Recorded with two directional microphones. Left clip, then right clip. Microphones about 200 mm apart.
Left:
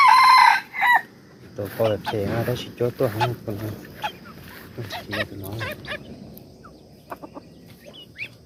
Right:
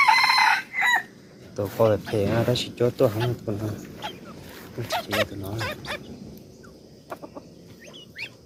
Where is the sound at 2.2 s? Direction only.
20° right (ahead or behind).